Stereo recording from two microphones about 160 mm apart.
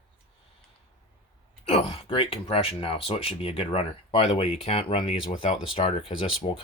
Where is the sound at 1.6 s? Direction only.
35° left (ahead or behind).